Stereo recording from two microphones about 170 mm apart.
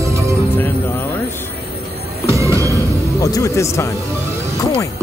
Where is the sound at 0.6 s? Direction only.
10° left (ahead or behind).